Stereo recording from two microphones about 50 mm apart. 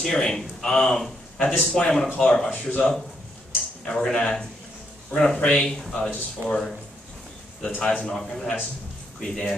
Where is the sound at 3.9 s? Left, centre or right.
Centre.